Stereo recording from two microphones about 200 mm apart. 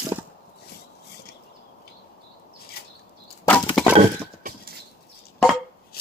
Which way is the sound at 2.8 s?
50° left (ahead or behind).